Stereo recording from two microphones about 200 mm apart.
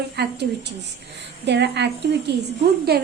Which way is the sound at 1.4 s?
60° right (ahead or behind).